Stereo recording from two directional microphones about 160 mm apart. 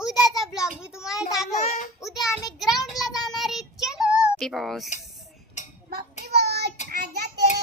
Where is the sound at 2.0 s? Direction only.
Centre (ahead or behind).